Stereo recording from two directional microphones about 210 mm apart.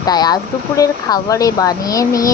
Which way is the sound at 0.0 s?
20° left (ahead or behind).